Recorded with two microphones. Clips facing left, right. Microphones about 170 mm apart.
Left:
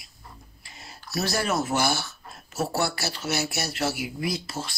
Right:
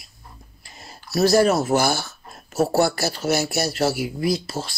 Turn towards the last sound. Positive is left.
turn(degrees=-35)  # may be behind; listen again after turning